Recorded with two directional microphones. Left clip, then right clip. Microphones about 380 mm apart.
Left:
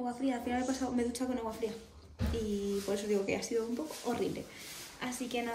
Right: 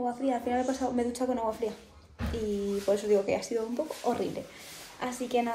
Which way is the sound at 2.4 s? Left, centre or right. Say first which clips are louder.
Right 7 dB; centre.